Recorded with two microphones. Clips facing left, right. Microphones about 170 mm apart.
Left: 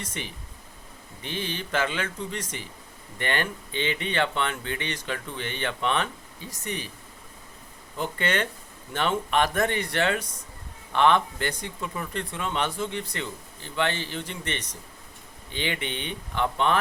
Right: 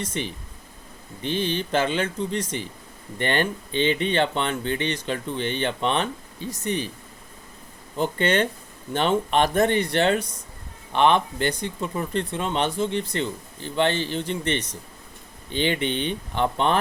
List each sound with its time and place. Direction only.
0.0 s speech: 20° right (ahead or behind)
7.9 s speech: 25° right (ahead or behind)